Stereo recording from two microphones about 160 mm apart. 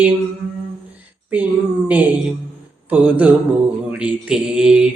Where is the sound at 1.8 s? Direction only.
10° right (ahead or behind).